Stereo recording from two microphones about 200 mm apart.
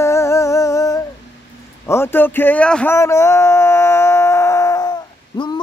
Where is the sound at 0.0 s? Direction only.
15° left (ahead or behind).